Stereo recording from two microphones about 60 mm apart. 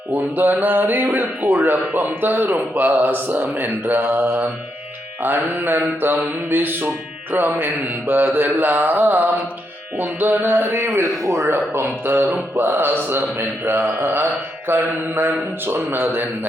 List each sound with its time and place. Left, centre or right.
0.1 s a man's voice: right
11.5 s speech: right